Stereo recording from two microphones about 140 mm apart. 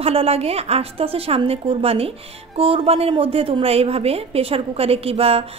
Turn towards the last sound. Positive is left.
turn(degrees=-45)  # may be behind; listen again after turning